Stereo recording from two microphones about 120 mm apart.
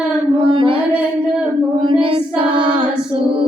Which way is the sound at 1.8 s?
45° right (ahead or behind).